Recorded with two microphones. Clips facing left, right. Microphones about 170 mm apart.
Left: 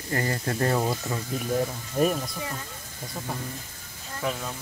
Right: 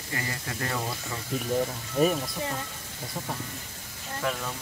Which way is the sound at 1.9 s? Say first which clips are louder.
Even; centre (ahead or behind).